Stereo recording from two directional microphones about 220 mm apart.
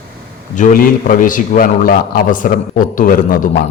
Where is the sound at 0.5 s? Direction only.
40° left (ahead or behind).